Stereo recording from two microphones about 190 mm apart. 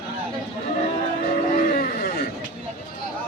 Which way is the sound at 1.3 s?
45° left (ahead or behind).